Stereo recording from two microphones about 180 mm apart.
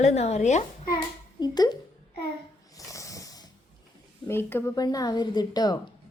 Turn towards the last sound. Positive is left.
turn(degrees=20)  # may be behind; listen again after turning